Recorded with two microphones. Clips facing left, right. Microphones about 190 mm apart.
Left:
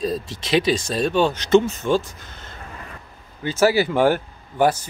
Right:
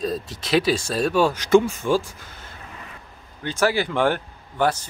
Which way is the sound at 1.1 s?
25° left (ahead or behind).